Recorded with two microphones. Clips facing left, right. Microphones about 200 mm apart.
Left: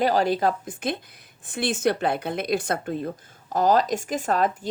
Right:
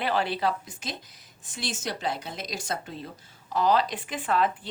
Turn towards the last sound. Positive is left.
turn(degrees=45)  # may be behind; listen again after turning